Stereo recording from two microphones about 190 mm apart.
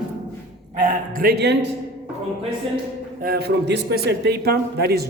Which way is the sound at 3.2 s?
55° right (ahead or behind).